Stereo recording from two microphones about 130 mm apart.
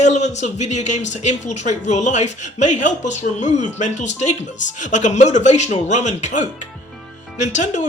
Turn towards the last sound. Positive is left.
turn(degrees=65)  # may be behind; listen again after turning